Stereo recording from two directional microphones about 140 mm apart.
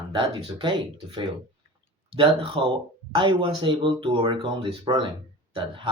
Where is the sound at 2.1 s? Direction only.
35° right (ahead or behind).